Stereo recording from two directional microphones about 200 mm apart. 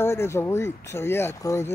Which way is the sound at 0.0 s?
15° left (ahead or behind).